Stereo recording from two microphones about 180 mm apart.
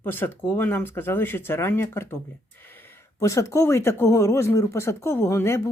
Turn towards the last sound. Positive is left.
turn(degrees=15)  # may be behind; listen again after turning